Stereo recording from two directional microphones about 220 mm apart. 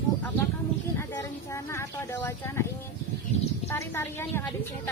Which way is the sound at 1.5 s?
10° left (ahead or behind).